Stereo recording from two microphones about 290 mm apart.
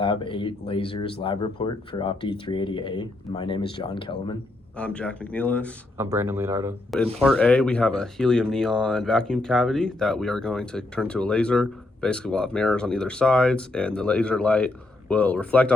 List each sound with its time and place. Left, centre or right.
0.0 s speech: centre
4.8 s speech: centre
6.0 s speech: centre
7.2 s speech: centre